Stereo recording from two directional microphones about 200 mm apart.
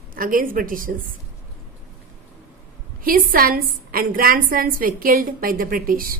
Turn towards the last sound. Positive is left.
turn(degrees=-45)  # may be behind; listen again after turning